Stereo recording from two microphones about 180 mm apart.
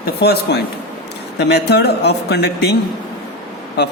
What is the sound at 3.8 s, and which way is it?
Speech, 65° left (ahead or behind).